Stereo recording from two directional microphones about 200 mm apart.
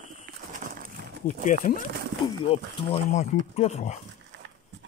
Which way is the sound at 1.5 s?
40° left (ahead or behind).